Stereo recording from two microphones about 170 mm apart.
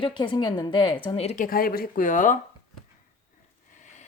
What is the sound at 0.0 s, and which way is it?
A woman's voice, 30° left (ahead or behind).